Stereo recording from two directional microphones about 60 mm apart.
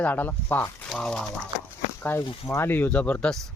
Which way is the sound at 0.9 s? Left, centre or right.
Centre.